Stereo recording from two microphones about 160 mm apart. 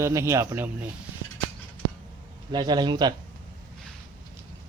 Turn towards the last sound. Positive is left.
turn(degrees=-25)  # may be behind; listen again after turning